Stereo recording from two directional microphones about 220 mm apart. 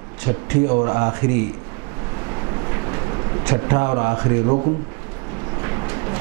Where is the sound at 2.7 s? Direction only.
20° right (ahead or behind).